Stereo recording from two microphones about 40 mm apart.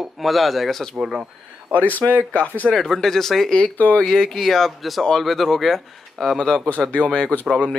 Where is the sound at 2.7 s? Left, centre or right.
Centre.